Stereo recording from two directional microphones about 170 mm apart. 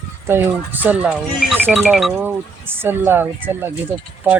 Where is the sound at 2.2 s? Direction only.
10° right (ahead or behind).